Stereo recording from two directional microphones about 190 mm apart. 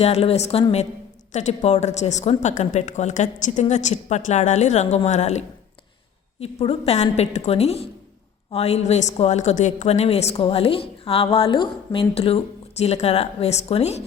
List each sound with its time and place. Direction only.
0.0 s speech: 30° left (ahead or behind)